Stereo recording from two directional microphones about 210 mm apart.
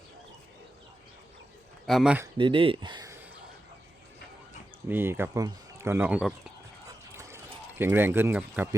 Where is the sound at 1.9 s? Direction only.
5° right (ahead or behind).